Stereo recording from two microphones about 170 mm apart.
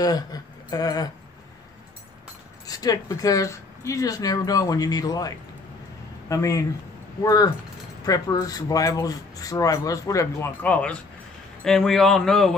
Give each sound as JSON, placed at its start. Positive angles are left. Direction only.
{"t": 0.0, "sound": "speech", "side_deg": 20}
{"t": 2.6, "sound": "a man's voice", "side_deg": 20}